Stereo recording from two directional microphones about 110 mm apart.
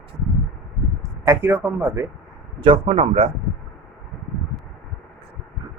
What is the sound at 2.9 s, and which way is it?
Speech, 70° right (ahead or behind).